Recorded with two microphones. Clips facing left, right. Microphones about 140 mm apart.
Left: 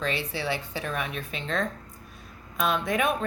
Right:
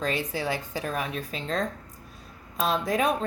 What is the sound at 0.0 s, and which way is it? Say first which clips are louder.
A woman's voice: right 1 dB; 40° right (ahead or behind).